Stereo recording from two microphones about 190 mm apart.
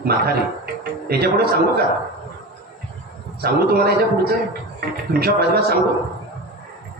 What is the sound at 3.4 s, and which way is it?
A man's voice, 55° right (ahead or behind).